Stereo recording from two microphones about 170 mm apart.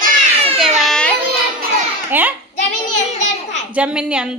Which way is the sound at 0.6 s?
Centre (ahead or behind).